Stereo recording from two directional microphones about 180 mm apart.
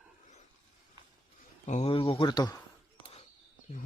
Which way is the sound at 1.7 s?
35° left (ahead or behind).